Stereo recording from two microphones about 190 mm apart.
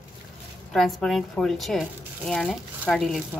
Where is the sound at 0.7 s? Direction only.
Centre (ahead or behind).